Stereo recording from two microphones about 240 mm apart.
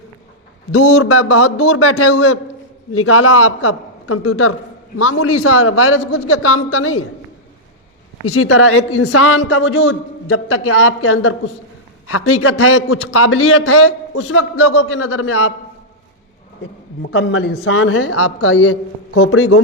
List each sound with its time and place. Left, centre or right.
0.7 s a man's voice: left
8.3 s a man's voice: left
17.0 s a man's voice: left